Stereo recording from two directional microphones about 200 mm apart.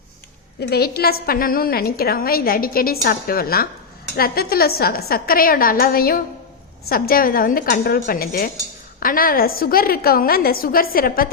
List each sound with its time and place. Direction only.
0.7 s a woman's voice: 50° left (ahead or behind)